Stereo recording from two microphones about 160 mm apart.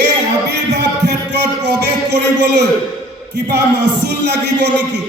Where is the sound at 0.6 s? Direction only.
90° right.